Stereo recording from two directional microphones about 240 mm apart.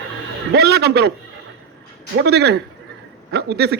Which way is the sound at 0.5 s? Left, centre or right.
Right.